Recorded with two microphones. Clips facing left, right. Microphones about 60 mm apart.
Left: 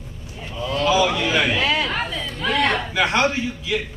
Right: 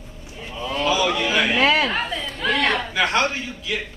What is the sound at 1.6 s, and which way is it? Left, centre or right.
Speech, right.